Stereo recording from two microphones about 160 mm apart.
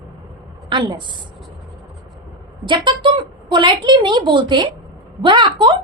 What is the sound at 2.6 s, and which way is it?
A woman's voice, 30° right (ahead or behind).